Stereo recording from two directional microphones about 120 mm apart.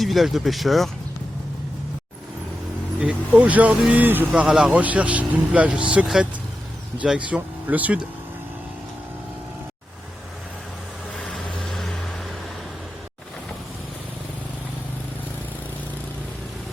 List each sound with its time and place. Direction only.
0.0 s speech: centre (ahead or behind)
3.0 s speech: 10° right (ahead or behind)
4.3 s speech: 5° right (ahead or behind)
11.2 s vehicle: 5° left (ahead or behind)